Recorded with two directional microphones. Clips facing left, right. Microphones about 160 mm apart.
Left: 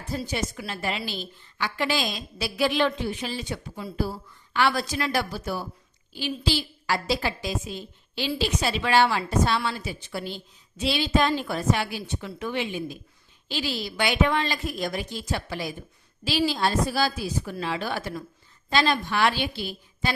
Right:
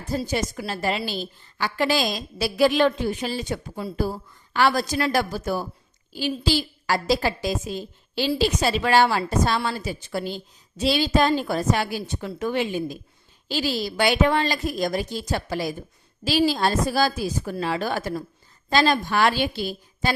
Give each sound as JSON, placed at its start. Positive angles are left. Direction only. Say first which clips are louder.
{"t": 0.3, "sound": "a woman's voice", "louder": "right 4 dB", "side_deg": -40}